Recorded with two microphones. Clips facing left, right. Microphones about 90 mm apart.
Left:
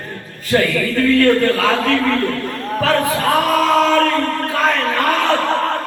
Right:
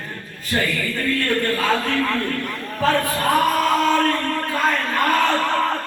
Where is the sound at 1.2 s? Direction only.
90° left.